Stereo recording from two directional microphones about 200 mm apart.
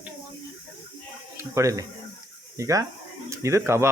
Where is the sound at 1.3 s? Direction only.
15° right (ahead or behind).